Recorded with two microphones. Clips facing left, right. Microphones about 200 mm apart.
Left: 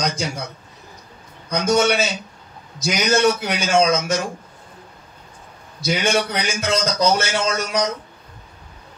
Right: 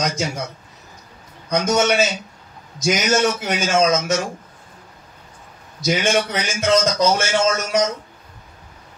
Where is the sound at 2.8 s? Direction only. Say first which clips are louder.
Even; 45° right (ahead or behind).